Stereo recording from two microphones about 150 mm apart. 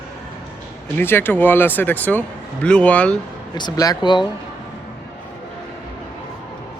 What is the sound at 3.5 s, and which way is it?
Speech, 25° left (ahead or behind).